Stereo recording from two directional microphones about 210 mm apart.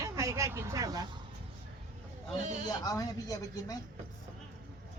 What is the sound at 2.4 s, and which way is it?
Speech, 35° right (ahead or behind).